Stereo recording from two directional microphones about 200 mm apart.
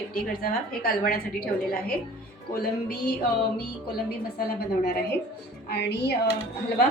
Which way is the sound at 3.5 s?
50° left (ahead or behind).